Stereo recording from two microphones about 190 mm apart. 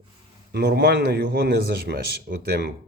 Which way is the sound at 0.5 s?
60° right (ahead or behind).